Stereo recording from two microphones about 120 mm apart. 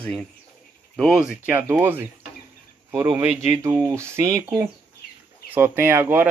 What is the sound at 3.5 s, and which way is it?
Speech, 25° right (ahead or behind).